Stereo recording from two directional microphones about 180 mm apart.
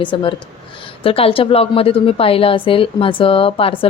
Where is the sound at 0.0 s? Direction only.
25° left (ahead or behind).